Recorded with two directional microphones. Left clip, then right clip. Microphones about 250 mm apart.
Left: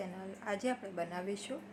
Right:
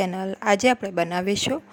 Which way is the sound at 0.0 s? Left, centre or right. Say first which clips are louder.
Right 18 dB; right.